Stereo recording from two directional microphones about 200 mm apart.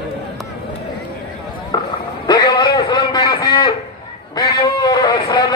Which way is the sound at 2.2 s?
20° left (ahead or behind).